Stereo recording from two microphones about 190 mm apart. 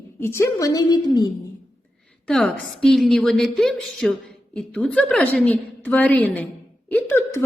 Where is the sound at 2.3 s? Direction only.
5° left (ahead or behind).